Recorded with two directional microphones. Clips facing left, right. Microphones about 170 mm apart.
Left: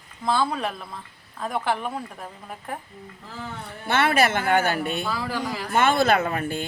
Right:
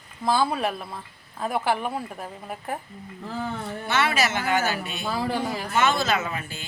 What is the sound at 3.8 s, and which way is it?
A woman's voice, 55° left (ahead or behind).